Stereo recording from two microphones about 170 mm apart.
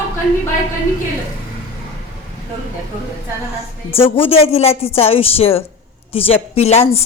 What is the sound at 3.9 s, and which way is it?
A woman's voice, 35° left (ahead or behind).